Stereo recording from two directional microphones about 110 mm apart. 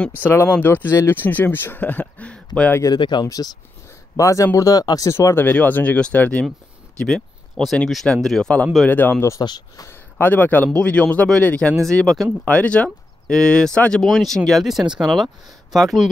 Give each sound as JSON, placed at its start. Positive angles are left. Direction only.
{"t": 0.2, "sound": "speech", "side_deg": 20}
{"t": 2.9, "sound": "speech", "side_deg": 40}
{"t": 5.1, "sound": "speech", "side_deg": 20}
{"t": 9.4, "sound": "speech", "side_deg": 40}
{"t": 9.8, "sound": "speech", "side_deg": 20}
{"t": 12.4, "sound": "speech", "side_deg": 10}